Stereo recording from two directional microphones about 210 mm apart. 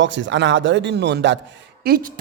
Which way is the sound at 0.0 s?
60° right (ahead or behind).